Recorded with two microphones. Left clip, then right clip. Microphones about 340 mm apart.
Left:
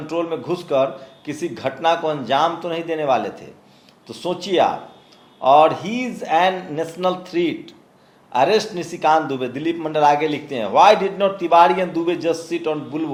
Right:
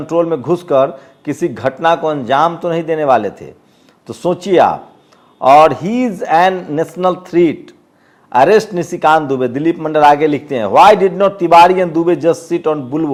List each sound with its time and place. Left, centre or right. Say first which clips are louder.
0.1 s a man's voice: right 9 dB; right